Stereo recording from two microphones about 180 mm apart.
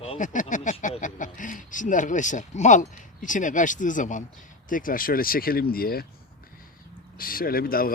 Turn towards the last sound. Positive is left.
turn(degrees=55)  # may be behind; listen again after turning